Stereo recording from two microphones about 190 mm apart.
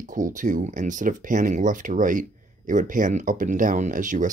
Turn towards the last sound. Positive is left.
turn(degrees=-40)  # may be behind; listen again after turning